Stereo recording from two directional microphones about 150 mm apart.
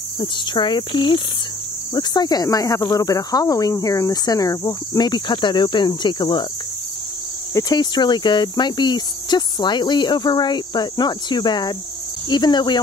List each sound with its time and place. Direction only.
0.2 s cricket: 30° left (ahead or behind)
2.0 s speech: 25° left (ahead or behind)
7.5 s speech: 25° left (ahead or behind)